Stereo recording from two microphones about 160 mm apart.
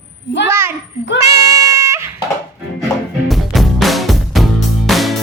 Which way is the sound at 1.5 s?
20° right (ahead or behind).